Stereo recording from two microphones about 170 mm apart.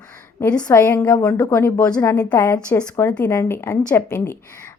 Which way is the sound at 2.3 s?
20° left (ahead or behind).